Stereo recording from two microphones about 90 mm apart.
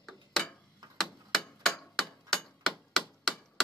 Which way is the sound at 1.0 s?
5° left (ahead or behind).